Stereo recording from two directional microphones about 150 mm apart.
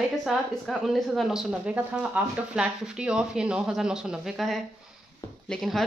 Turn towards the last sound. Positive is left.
turn(degrees=0)  # may be behind; listen again after turning